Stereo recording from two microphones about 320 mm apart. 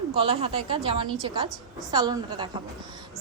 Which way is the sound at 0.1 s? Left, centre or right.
Centre.